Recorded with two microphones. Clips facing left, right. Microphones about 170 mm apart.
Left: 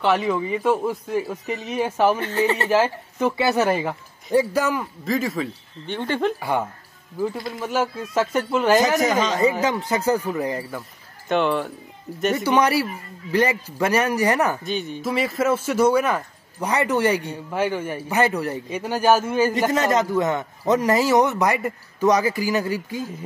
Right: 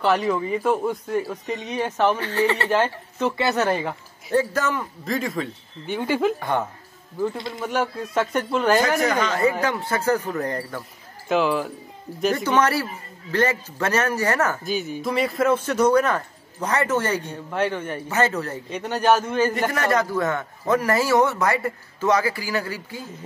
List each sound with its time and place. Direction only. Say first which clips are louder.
0.0 s a man's voice: even; centre (ahead or behind)
2.1 s speech: left 1 dB; 20° left (ahead or behind)
2.7 s a man's voice: left 2 dB; 10° left (ahead or behind); by 6.3 s 10° right (ahead or behind)
7.2 s a man's voice: even; 5° left (ahead or behind)
9.0 s a man's voice: left 1 dB; 20° left (ahead or behind)
11.2 s a man's voice: even; centre (ahead or behind)
12.4 s a man's voice: left 3 dB; 15° left (ahead or behind)
14.6 s a man's voice: even; 5° right (ahead or behind)
19.5 s a man's voice: left 2 dB; 20° left (ahead or behind)